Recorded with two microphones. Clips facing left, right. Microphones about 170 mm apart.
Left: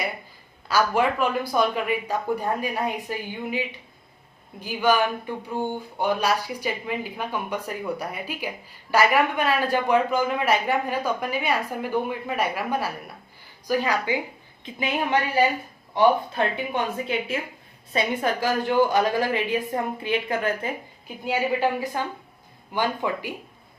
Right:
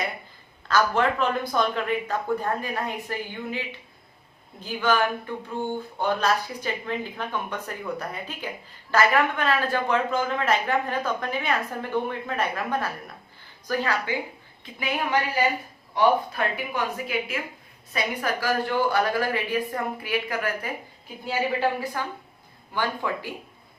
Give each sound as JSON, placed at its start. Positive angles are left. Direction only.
{"t": 0.7, "sound": "speech", "side_deg": 10}
{"t": 4.6, "sound": "speech", "side_deg": 15}
{"t": 5.6, "sound": "a sound", "side_deg": 45}
{"t": 6.0, "sound": "a woman's voice", "side_deg": 10}
{"t": 16.0, "sound": "a woman's voice", "side_deg": 25}